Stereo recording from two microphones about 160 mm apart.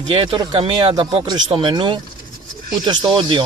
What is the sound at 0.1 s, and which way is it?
A man's voice, 30° right (ahead or behind).